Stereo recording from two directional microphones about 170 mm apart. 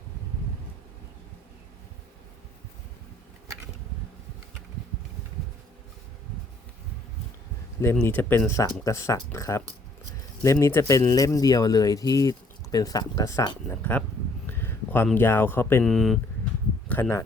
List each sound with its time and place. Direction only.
7.9 s a man's voice: 10° left (ahead or behind)
15.8 s speech: centre (ahead or behind)
16.9 s speech: 15° left (ahead or behind)